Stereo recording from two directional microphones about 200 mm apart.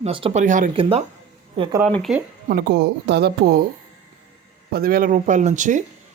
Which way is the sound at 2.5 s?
55° right (ahead or behind).